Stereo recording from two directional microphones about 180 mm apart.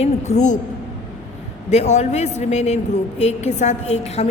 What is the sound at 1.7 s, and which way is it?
A man's voice, 40° left (ahead or behind).